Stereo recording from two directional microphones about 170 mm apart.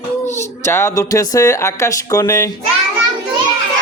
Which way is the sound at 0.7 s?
15° left (ahead or behind).